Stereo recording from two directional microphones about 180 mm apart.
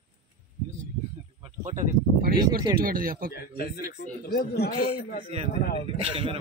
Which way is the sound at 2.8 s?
55° right (ahead or behind).